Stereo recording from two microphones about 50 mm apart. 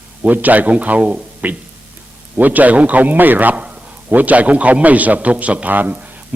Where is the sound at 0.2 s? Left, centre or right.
Right.